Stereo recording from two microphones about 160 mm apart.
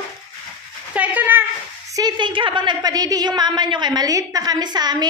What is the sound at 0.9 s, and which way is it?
Speech, 10° right (ahead or behind).